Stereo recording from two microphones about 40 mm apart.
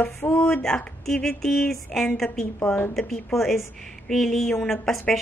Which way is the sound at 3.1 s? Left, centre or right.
Centre.